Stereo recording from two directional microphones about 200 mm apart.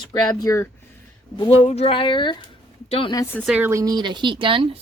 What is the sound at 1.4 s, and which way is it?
Speech, 30° left (ahead or behind).